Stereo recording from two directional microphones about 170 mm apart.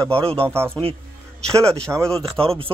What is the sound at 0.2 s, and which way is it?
Speech, 35° right (ahead or behind).